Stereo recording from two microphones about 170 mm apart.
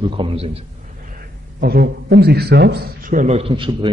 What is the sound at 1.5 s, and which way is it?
A man's voice, 65° right (ahead or behind).